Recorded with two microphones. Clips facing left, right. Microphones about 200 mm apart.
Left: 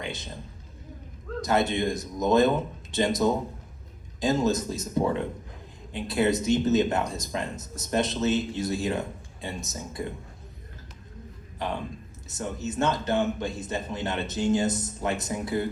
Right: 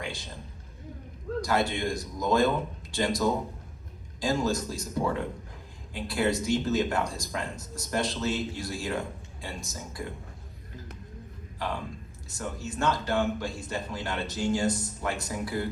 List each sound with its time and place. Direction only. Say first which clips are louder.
0.0 s a sound: left 2 dB; 20° left (ahead or behind)
1.4 s speech: left 3 dB; 20° left (ahead or behind)
11.6 s speech: left 2 dB; 20° left (ahead or behind)